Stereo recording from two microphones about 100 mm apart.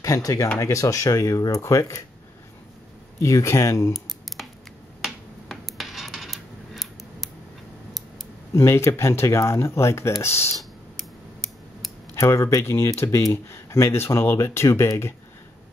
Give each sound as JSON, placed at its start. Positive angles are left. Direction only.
{"t": 0.0, "sound": "speech", "side_deg": 35}
{"t": 3.2, "sound": "speech", "side_deg": 30}
{"t": 5.0, "sound": "finger snapping", "side_deg": 0}
{"t": 8.5, "sound": "speech", "side_deg": 25}
{"t": 10.6, "sound": "a sound", "side_deg": 0}
{"t": 12.2, "sound": "speech", "side_deg": 30}